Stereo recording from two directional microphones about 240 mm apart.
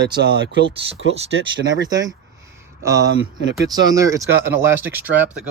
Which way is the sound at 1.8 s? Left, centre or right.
Centre.